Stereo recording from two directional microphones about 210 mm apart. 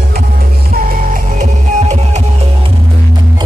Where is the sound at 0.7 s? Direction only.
40° right (ahead or behind).